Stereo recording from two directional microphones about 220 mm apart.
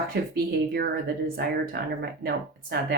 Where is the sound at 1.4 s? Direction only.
45° right (ahead or behind).